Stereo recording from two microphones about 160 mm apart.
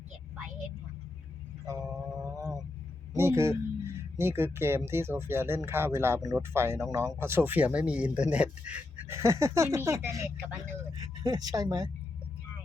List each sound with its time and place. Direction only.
2.2 s vehicle: 25° right (ahead or behind)
3.2 s speech: 15° right (ahead or behind)